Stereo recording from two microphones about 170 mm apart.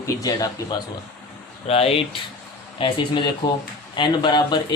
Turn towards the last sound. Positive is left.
turn(degrees=25)  # may be behind; listen again after turning